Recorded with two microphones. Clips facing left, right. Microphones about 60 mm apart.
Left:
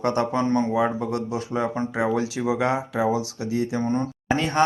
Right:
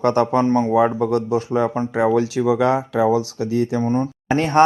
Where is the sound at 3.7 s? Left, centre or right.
Right.